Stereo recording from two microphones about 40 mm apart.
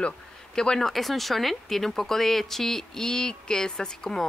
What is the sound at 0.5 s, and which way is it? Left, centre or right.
Speech, centre.